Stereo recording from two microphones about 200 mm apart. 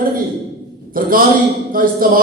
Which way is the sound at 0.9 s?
45° right (ahead or behind).